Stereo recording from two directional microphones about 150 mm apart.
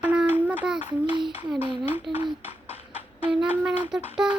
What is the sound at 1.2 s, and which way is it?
Speech, 5° right (ahead or behind).